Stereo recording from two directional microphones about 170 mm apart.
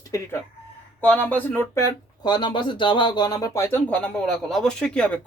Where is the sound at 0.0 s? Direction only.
20° left (ahead or behind).